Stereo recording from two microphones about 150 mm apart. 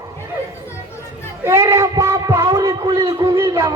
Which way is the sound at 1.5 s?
20° right (ahead or behind).